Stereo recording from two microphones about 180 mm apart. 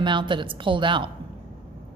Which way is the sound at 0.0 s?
25° right (ahead or behind).